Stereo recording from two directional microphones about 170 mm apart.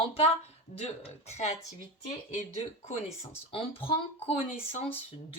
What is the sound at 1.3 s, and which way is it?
Speech, 40° left (ahead or behind).